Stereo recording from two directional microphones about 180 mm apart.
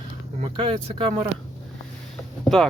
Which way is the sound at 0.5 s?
30° right (ahead or behind).